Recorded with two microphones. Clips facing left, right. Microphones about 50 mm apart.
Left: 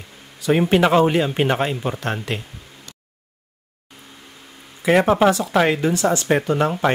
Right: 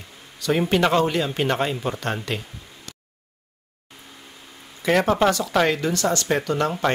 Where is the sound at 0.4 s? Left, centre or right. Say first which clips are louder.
Left 4 dB; centre.